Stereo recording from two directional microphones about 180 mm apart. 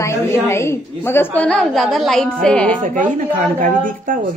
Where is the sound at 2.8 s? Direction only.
45° right (ahead or behind).